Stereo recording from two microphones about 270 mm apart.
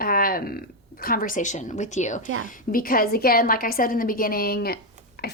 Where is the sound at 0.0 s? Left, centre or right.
Left.